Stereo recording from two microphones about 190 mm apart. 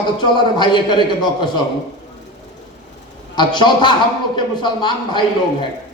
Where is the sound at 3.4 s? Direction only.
25° left (ahead or behind).